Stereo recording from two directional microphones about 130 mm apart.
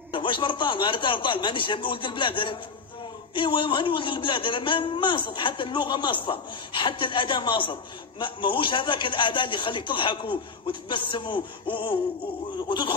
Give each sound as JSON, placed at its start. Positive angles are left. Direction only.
{"t": 0.1, "sound": "a man's voice", "side_deg": 40}